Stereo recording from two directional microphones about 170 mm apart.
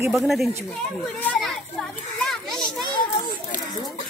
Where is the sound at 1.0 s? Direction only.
10° left (ahead or behind).